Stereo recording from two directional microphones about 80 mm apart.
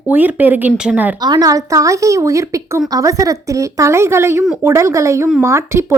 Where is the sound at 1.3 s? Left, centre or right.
Right.